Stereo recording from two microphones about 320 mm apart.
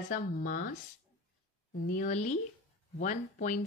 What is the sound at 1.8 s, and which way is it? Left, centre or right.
Speech, left.